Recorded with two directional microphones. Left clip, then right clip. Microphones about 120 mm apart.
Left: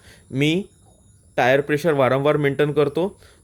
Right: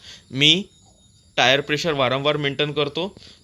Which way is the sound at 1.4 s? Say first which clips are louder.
Even; 35° left (ahead or behind).